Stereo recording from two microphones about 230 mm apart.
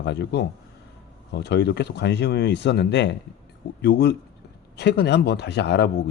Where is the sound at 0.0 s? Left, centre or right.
Left.